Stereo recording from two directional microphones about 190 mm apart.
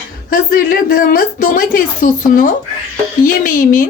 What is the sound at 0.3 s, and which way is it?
A woman's voice, 50° left (ahead or behind).